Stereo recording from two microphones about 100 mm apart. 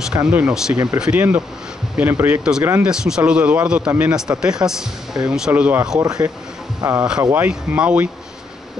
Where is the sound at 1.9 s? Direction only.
20° right (ahead or behind).